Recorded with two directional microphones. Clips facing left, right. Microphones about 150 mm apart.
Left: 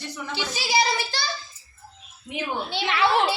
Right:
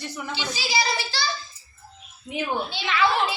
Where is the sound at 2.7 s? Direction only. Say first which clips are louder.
Left 3 dB; 65° left (ahead or behind).